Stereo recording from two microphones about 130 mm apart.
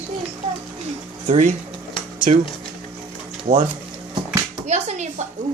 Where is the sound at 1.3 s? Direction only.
70° right (ahead or behind).